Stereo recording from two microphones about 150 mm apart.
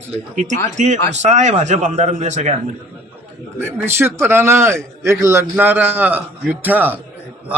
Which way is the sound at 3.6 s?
15° right (ahead or behind).